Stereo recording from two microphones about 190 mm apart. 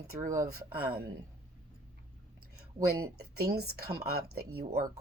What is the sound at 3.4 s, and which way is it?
Speech, 55° right (ahead or behind).